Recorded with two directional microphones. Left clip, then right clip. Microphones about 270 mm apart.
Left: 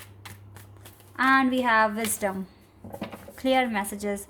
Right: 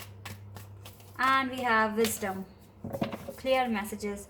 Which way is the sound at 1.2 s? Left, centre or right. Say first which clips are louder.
Left 5 dB; left.